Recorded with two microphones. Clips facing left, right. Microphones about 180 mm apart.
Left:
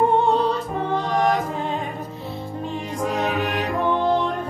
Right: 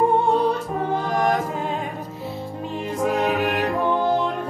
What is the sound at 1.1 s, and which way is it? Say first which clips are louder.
Chant: left 1 dB; 50° right (ahead or behind).